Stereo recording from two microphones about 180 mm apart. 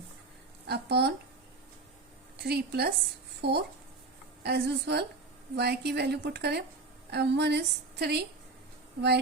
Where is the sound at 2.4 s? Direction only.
60° right (ahead or behind).